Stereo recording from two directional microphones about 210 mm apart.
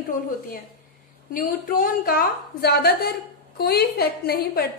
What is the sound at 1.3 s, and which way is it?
A woman's voice, 40° left (ahead or behind).